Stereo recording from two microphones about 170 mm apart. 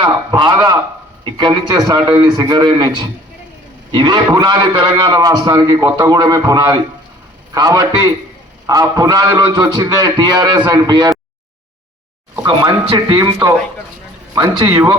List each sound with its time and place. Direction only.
0.0 s a man's voice: 25° right (ahead or behind)
12.4 s a man's voice: 25° right (ahead or behind)